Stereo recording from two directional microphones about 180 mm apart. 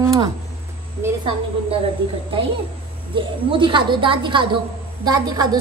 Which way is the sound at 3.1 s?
30° right (ahead or behind).